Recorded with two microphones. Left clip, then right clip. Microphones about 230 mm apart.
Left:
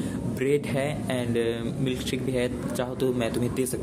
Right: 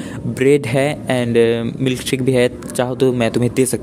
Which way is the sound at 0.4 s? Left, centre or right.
Right.